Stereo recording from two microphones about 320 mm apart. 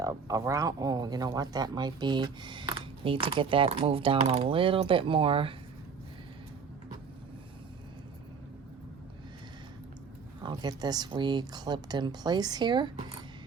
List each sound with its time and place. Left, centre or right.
0.0 s speech: centre
10.4 s speech: centre